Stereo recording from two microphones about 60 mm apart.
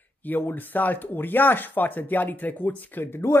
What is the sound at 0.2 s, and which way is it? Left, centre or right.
Speech, left.